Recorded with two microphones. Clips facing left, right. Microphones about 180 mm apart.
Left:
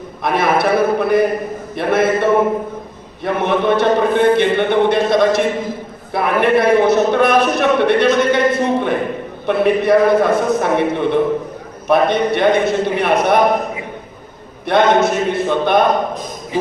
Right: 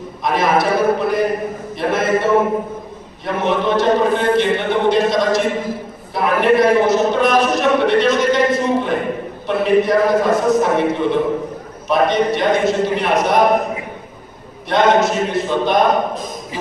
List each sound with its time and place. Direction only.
0.3 s a man's voice: 60° left (ahead or behind)
14.7 s a man's voice: 60° left (ahead or behind)